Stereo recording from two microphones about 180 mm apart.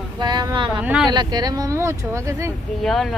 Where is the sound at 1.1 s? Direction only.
25° right (ahead or behind).